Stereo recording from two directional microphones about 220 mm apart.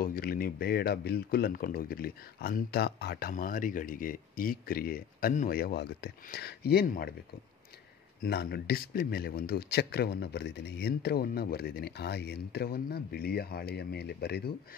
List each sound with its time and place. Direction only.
0.0 s speech: 40° left (ahead or behind)
8.2 s speech: 45° left (ahead or behind)